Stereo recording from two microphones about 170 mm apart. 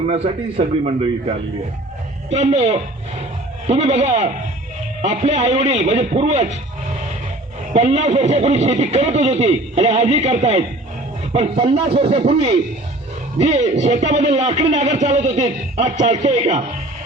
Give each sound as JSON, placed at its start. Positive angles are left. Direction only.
{"t": 0.1, "sound": "a man's voice", "side_deg": -35}
{"t": 2.3, "sound": "a man's voice", "side_deg": -40}
{"t": 7.7, "sound": "a man's voice", "side_deg": -40}